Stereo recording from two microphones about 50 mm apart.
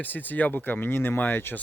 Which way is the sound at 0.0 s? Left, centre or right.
Left.